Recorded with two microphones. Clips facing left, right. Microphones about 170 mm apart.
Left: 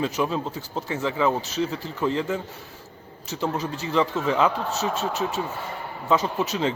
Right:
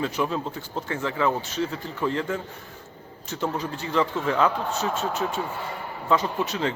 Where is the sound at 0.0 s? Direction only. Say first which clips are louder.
Left 1 dB; 20° left (ahead or behind).